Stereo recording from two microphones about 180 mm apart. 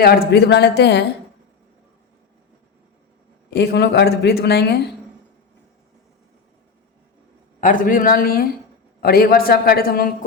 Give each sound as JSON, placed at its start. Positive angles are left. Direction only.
{"t": 0.0, "sound": "speech", "side_deg": 65}
{"t": 3.5, "sound": "a woman's voice", "side_deg": 65}
{"t": 7.6, "sound": "a man's voice", "side_deg": 45}